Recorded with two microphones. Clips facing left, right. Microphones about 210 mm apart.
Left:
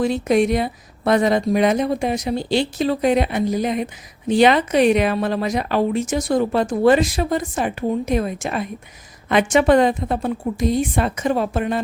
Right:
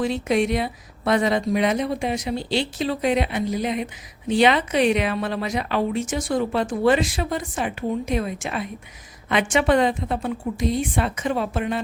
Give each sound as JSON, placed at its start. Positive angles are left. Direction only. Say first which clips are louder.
{"t": 0.0, "sound": "speech", "louder": "left 4 dB", "side_deg": 45}